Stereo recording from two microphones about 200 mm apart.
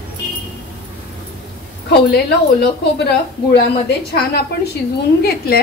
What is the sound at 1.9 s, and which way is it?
A woman's voice, 55° left (ahead or behind).